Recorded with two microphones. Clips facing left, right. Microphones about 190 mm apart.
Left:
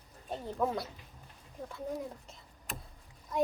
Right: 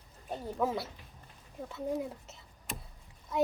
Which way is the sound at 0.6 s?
5° right (ahead or behind).